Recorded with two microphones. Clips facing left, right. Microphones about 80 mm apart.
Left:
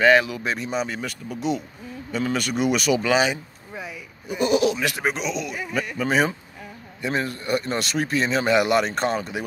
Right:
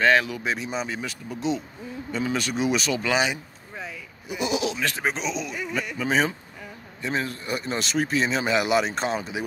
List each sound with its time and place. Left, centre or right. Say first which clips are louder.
0.0 s speech: left 3 dB; centre
2.1 s speech: left 2 dB; centre